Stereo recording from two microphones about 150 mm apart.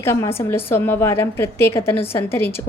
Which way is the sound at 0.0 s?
15° left (ahead or behind).